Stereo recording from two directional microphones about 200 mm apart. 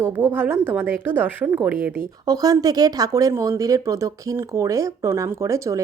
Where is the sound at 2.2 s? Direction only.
20° right (ahead or behind).